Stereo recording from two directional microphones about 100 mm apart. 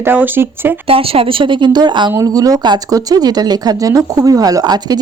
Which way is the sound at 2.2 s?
40° right (ahead or behind).